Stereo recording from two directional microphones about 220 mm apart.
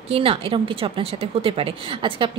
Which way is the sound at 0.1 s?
25° right (ahead or behind).